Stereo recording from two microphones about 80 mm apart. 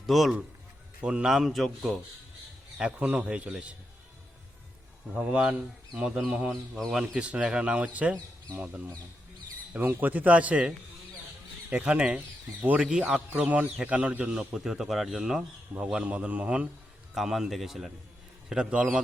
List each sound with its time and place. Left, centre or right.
0.0 s a man's voice: centre
2.7 s a man's voice: centre
5.1 s a man's voice: centre
6.5 s a man's voice: centre
6.9 s a man's voice: centre
17.2 s a man's voice: centre